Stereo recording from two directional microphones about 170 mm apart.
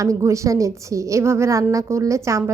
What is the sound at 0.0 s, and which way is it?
A woman's voice, 20° right (ahead or behind).